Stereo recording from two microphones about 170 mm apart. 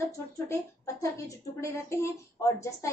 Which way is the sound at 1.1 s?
15° left (ahead or behind).